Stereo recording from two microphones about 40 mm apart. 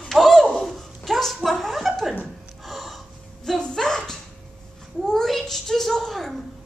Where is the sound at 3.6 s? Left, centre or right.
Centre.